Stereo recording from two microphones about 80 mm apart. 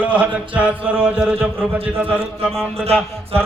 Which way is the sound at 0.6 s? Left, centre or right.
Centre.